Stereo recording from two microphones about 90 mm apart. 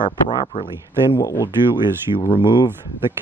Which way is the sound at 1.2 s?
35° left (ahead or behind).